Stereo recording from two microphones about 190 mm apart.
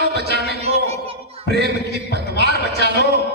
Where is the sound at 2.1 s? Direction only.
60° right (ahead or behind).